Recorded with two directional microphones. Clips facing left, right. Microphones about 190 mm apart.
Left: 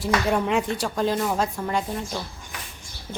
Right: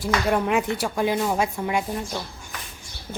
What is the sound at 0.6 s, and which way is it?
A woman's voice, 10° right (ahead or behind).